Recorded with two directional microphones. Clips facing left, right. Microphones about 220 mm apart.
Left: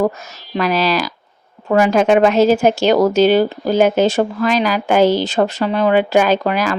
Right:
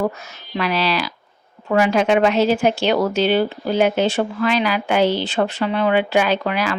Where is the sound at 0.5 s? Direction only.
45° left (ahead or behind).